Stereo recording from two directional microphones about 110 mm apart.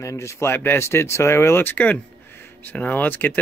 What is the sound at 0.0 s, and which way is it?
Speech, 25° left (ahead or behind).